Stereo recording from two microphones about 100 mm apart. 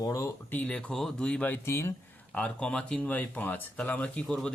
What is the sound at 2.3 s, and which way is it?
Speech, 10° left (ahead or behind).